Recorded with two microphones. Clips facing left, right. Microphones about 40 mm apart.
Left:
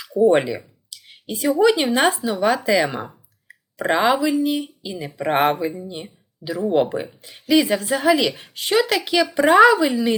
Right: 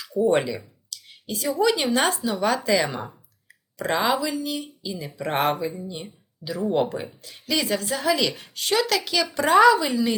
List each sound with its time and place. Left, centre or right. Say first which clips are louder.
0.3 s a sound: left 4 dB; left
1.5 s speech: left 4 dB; centre
2.6 s speech: left 2 dB; centre
3.5 s speech: left 5 dB; left